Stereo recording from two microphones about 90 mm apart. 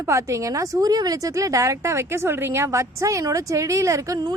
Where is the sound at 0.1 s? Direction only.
40° right (ahead or behind).